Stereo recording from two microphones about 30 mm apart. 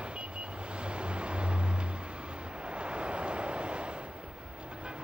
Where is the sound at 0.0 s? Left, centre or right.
Right.